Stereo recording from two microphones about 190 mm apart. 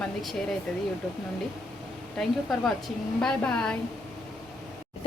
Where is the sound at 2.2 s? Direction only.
Centre (ahead or behind).